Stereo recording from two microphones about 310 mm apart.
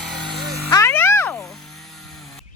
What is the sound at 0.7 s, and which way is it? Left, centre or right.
Music, centre.